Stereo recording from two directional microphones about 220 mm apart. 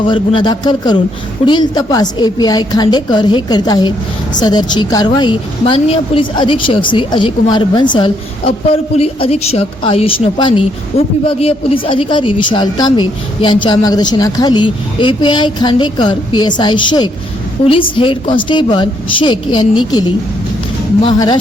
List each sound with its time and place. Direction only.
0.0 s a woman's voice: 20° left (ahead or behind)